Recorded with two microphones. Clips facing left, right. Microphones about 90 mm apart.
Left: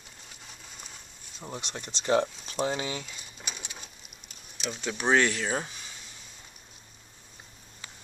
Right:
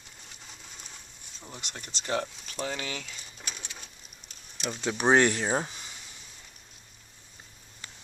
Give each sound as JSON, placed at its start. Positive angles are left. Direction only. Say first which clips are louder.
{"t": 1.5, "sound": "speech", "louder": "left 5 dB", "side_deg": 25}
{"t": 3.1, "sound": "bird", "louder": "left 1 dB", "side_deg": 5}
{"t": 4.5, "sound": "a sound", "louder": "right 1 dB", "side_deg": 0}
{"t": 4.8, "sound": "speech", "louder": "right 2 dB", "side_deg": -20}